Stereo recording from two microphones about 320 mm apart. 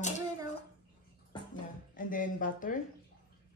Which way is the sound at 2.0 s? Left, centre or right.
Left.